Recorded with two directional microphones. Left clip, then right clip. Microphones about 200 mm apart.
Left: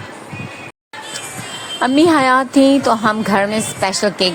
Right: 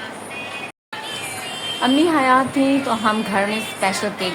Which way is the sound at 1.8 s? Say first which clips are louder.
Left 5 dB; 45° left (ahead or behind).